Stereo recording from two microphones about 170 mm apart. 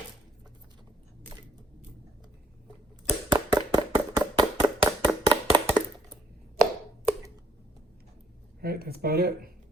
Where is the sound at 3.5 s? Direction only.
25° right (ahead or behind).